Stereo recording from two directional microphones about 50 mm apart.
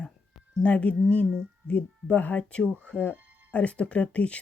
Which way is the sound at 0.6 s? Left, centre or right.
Left.